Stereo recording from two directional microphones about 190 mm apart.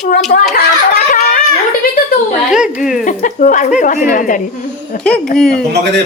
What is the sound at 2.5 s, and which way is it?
Speech, 5° right (ahead or behind).